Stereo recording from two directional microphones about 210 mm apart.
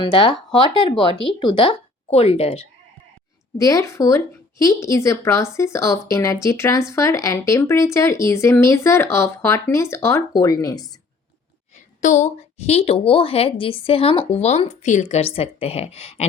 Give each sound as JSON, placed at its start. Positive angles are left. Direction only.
{"t": 0.0, "sound": "a woman's voice", "side_deg": 20}
{"t": 3.6, "sound": "speech", "side_deg": 15}
{"t": 12.0, "sound": "a woman's voice", "side_deg": 35}